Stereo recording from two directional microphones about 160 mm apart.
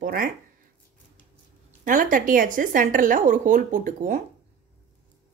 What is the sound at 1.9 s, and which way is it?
A woman's voice, 55° right (ahead or behind).